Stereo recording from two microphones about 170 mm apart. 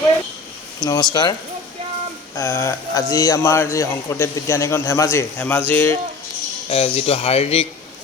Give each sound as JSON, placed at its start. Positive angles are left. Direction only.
{"t": 0.8, "sound": "a man's voice", "side_deg": 25}
{"t": 6.7, "sound": "speech", "side_deg": 35}